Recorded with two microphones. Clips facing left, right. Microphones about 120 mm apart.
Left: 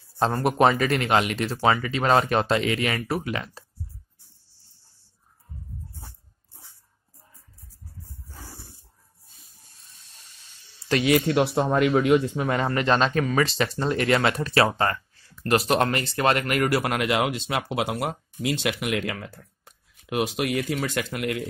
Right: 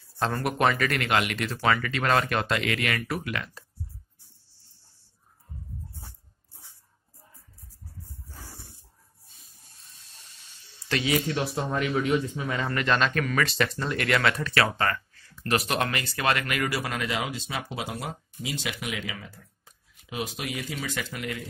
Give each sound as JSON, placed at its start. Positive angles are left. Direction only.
{"t": 0.2, "sound": "speech", "side_deg": 35}
{"t": 11.1, "sound": "speech", "side_deg": 50}
{"t": 11.3, "sound": "speech", "side_deg": 65}
{"t": 12.6, "sound": "speech", "side_deg": 35}
{"t": 16.3, "sound": "speech", "side_deg": 45}